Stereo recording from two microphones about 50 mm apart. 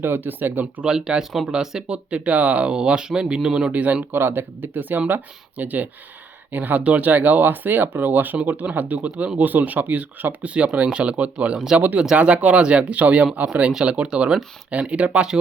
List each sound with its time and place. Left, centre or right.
0.0 s speech: right
0.9 s speech: centre
1.9 s speech: right
3.7 s speech: right
4.1 s speech: right
9.0 s speech: right
9.4 s speech: right